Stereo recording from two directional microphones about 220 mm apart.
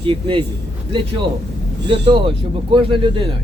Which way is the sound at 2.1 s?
20° right (ahead or behind).